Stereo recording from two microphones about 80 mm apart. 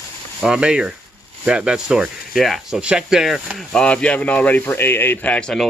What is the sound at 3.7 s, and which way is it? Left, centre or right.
A man's voice, centre.